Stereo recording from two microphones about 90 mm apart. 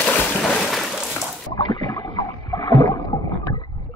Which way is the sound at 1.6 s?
55° left (ahead or behind).